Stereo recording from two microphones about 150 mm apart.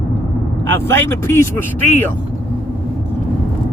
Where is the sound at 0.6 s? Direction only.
15° left (ahead or behind).